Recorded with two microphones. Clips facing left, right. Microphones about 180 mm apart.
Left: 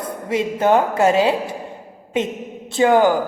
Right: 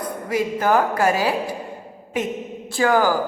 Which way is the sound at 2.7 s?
25° left (ahead or behind).